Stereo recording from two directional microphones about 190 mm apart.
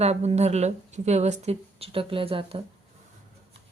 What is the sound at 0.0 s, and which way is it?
Speech, 35° right (ahead or behind).